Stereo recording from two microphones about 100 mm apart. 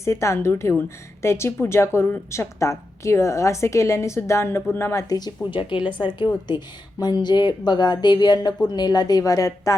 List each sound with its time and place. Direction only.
0.0 s a woman's voice: 30° left (ahead or behind)